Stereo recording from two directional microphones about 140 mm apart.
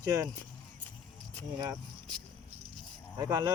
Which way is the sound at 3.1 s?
25° right (ahead or behind).